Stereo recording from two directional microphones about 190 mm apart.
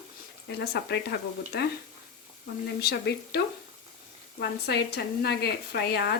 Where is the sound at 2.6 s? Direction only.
60° left (ahead or behind).